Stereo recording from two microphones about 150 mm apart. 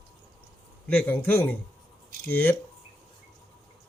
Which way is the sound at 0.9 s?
15° left (ahead or behind).